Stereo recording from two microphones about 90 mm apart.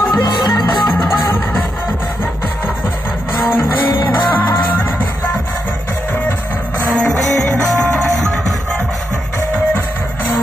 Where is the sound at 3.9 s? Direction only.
55° left (ahead or behind).